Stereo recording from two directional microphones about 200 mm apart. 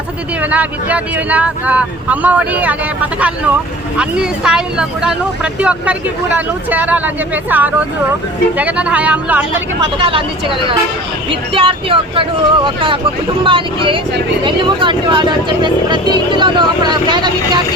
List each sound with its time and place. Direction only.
0.5 s speech: 5° right (ahead or behind)
3.9 s speech: 5° right (ahead or behind)
10.0 s speech: 25° right (ahead or behind)
11.5 s speech: 25° right (ahead or behind)